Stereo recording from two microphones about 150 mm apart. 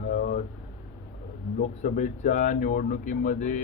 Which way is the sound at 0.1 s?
65° left (ahead or behind).